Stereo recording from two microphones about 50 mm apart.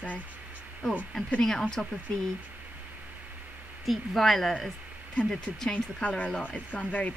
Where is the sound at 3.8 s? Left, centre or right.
Centre.